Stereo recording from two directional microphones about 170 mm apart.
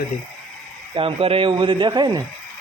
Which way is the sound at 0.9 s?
35° right (ahead or behind).